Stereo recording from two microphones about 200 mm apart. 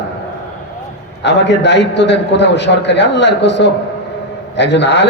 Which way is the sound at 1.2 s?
60° left (ahead or behind).